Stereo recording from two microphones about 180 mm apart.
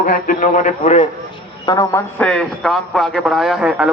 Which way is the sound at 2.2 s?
5° left (ahead or behind).